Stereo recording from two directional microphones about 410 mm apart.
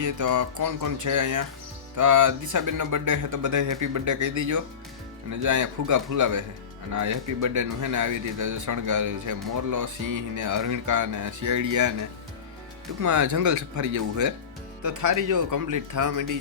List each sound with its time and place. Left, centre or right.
0.0 s speech: right